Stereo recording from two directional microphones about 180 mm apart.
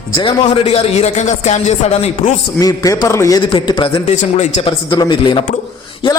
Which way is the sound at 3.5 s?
30° left (ahead or behind).